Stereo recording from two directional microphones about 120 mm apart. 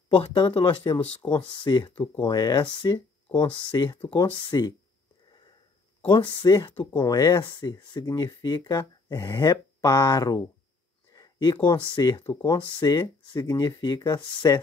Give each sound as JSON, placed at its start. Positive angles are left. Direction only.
{"t": 0.1, "sound": "speech", "side_deg": 45}
{"t": 0.9, "sound": "speech", "side_deg": 10}
{"t": 1.3, "sound": "speech", "side_deg": 40}
{"t": 6.0, "sound": "speech", "side_deg": 45}
{"t": 11.1, "sound": "a sound", "side_deg": 35}
{"t": 12.0, "sound": "speech", "side_deg": 30}